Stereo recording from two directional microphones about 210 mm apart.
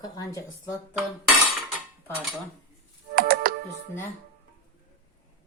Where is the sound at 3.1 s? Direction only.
45° right (ahead or behind).